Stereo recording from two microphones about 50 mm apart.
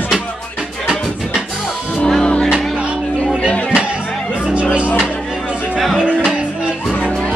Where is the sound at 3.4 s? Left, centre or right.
Left.